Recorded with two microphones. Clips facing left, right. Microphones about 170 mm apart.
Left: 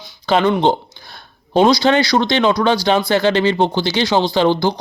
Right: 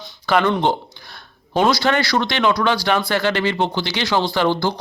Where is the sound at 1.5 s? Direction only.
20° left (ahead or behind).